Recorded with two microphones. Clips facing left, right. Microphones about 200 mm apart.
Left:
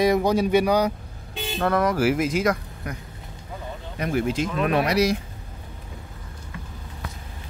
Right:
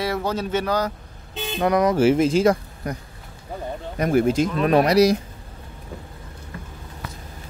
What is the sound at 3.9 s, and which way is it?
Speech, 45° right (ahead or behind).